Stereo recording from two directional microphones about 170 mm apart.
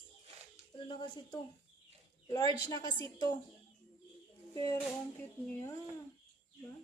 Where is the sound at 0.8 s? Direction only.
30° left (ahead or behind).